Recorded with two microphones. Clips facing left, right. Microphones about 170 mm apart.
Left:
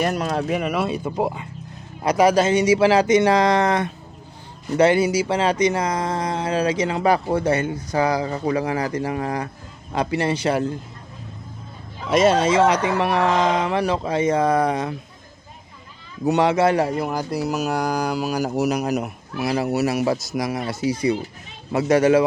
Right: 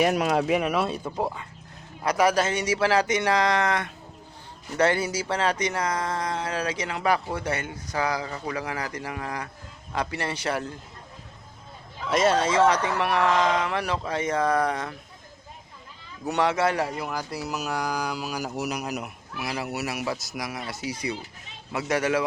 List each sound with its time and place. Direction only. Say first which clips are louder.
0.0 s speech: even; 10° right (ahead or behind)
1.1 s speech: left 5 dB; 20° left (ahead or behind)
4.8 s speech: left 7 dB; 15° left (ahead or behind)
12.0 s speech: left 5 dB; 15° left (ahead or behind)
16.2 s speech: left 6 dB; 20° left (ahead or behind)
17.5 s speech: left 5 dB; 40° left (ahead or behind)